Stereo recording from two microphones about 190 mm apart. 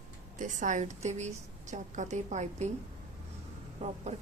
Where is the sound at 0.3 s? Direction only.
40° right (ahead or behind).